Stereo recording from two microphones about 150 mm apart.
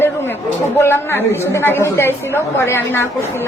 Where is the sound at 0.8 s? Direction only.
15° left (ahead or behind).